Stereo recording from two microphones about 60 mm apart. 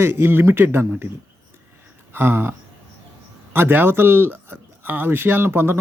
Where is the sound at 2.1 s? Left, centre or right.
Right.